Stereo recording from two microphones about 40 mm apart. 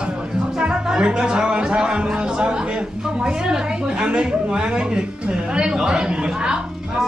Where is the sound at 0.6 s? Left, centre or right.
Centre.